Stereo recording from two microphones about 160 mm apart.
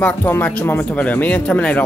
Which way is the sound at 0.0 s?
10° left (ahead or behind).